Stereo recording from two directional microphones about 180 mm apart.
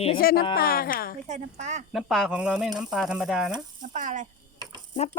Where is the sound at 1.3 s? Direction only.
40° right (ahead or behind).